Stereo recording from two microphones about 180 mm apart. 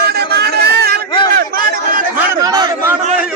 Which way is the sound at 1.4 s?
50° right (ahead or behind).